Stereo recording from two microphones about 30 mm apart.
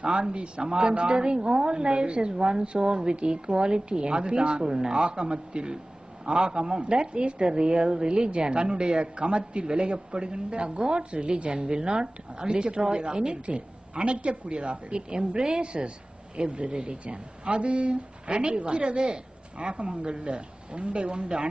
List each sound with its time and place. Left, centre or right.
0.0 s a woman's voice: right
18.2 s a woman's voice: right